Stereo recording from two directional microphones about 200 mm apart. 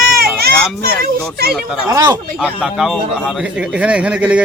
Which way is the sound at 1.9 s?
20° right (ahead or behind).